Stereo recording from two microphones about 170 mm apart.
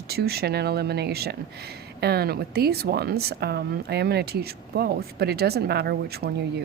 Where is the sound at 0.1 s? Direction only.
65° right (ahead or behind).